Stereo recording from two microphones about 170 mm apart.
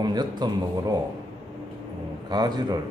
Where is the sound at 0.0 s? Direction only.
25° right (ahead or behind).